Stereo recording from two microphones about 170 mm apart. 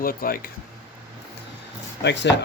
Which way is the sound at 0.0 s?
60° left (ahead or behind).